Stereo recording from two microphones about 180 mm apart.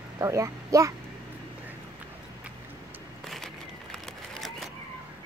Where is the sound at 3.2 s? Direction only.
Centre (ahead or behind).